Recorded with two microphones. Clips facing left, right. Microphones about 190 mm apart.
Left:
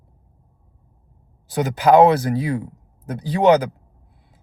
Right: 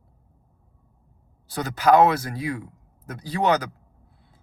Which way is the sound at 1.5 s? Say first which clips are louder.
Left 4 dB; 20° left (ahead or behind).